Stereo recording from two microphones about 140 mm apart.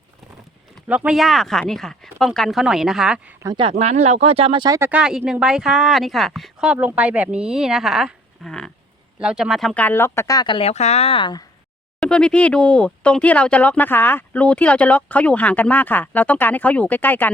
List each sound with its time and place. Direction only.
0.9 s speech: 10° right (ahead or behind)
3.6 s speech: 45° right (ahead or behind)
4.9 s speech: 5° right (ahead or behind)
9.8 s speech: 15° left (ahead or behind); by 10.7 s 35° left (ahead or behind)
10.7 s a woman's voice: 50° left (ahead or behind); by 11.4 s 35° left (ahead or behind)
11.9 s speech: 5° left (ahead or behind)